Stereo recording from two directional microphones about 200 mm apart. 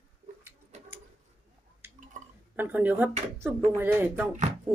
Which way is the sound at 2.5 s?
10° right (ahead or behind).